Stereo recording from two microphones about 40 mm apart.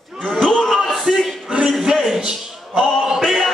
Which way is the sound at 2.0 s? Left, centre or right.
Centre.